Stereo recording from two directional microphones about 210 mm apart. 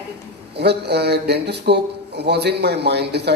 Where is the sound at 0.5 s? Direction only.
50° right (ahead or behind).